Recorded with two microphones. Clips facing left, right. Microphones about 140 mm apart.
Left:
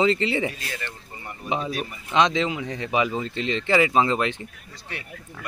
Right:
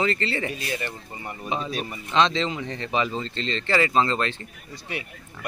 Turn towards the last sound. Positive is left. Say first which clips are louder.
# right 4 dB
turn(degrees=-15)  # may be behind; listen again after turning